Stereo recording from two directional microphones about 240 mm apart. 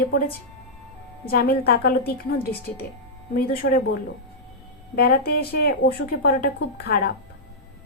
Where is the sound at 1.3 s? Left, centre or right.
Left.